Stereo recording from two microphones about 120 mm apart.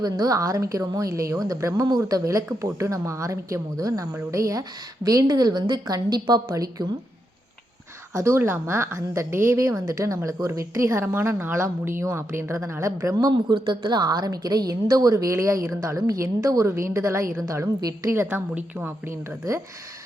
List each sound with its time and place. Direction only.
0.0 s a woman's voice: 30° right (ahead or behind)
8.1 s a woman's voice: 25° right (ahead or behind)
13.1 s a woman's voice: 40° right (ahead or behind); by 19.6 s 20° right (ahead or behind)